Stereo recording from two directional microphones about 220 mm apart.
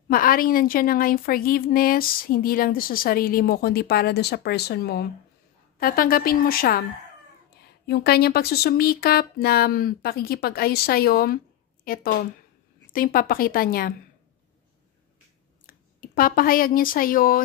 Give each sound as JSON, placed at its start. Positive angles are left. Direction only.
{"t": 0.1, "sound": "a woman's voice", "side_deg": 40}
{"t": 7.8, "sound": "a woman's voice", "side_deg": 45}
{"t": 15.6, "sound": "speech", "side_deg": 40}